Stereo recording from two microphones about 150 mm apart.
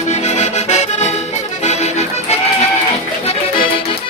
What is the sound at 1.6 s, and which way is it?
Music, 45° left (ahead or behind).